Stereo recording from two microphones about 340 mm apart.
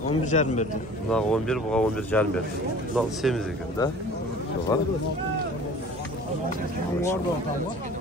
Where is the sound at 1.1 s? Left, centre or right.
Centre.